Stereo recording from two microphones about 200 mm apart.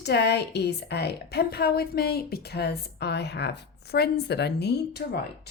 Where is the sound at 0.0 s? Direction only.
55° left (ahead or behind).